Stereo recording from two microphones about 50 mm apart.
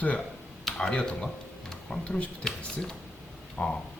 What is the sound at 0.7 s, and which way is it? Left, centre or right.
Speech, centre.